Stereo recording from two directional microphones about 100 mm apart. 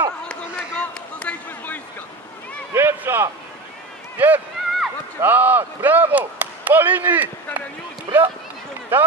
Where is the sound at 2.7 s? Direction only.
20° right (ahead or behind).